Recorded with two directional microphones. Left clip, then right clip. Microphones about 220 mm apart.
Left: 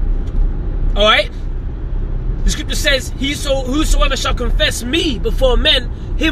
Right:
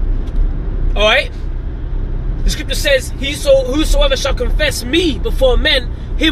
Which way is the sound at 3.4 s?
15° left (ahead or behind).